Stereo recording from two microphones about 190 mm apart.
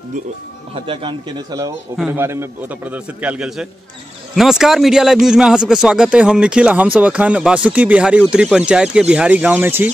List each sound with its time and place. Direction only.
0.7 s speech: 25° right (ahead or behind)
2.0 s a man's voice: 10° right (ahead or behind)